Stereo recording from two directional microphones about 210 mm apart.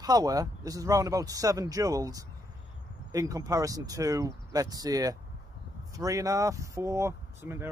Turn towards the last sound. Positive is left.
turn(degrees=-10)  # may be behind; listen again after turning